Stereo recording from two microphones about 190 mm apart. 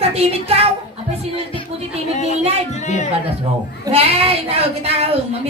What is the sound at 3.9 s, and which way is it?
Speech, 30° right (ahead or behind).